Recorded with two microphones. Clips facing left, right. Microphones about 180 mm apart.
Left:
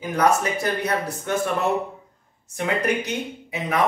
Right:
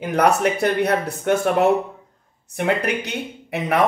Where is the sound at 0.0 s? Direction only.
65° right (ahead or behind).